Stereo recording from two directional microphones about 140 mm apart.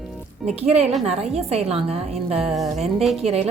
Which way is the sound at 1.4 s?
45° right (ahead or behind).